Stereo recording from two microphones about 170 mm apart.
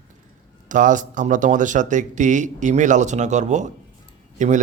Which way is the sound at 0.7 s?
50° right (ahead or behind).